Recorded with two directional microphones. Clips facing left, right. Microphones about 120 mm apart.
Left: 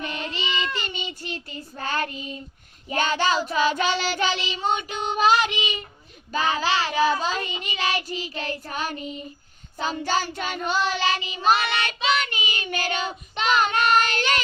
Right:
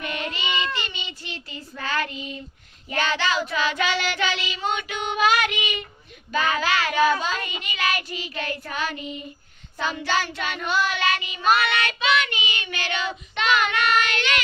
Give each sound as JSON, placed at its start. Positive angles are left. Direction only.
{"t": 0.0, "sound": "child singing", "side_deg": 30}